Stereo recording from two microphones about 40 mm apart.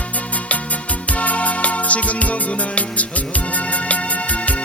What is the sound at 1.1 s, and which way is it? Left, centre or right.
Music, left.